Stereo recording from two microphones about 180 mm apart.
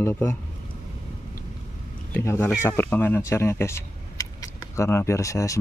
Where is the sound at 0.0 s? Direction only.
10° left (ahead or behind).